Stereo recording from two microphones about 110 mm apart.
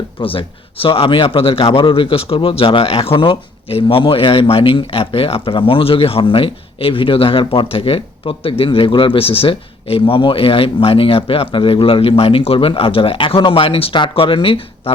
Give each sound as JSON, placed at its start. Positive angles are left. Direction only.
{"t": 0.2, "sound": "speech", "side_deg": 55}